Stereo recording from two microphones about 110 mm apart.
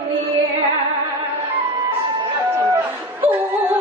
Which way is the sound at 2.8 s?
15° right (ahead or behind).